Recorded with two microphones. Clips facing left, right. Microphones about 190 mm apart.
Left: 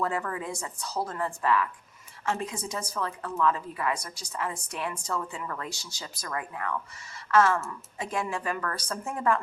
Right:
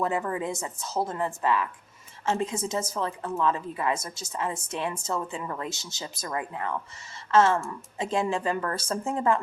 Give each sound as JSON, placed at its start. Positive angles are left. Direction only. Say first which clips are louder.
{"t": 0.0, "sound": "a woman's voice", "louder": "right 3 dB", "side_deg": -20}